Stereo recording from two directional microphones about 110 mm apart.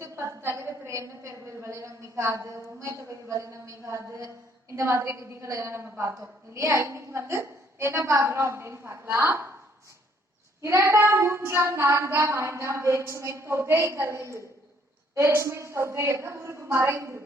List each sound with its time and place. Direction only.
0.0 s a woman's voice: 25° right (ahead or behind)
10.6 s a woman's voice: 25° right (ahead or behind)